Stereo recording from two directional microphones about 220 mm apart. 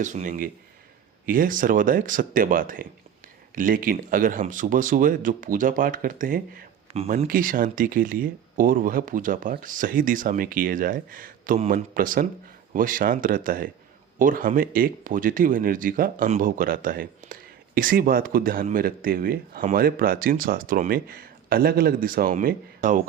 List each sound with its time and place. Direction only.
0.0 s speech: 35° right (ahead or behind)
6.9 s speech: 30° right (ahead or behind)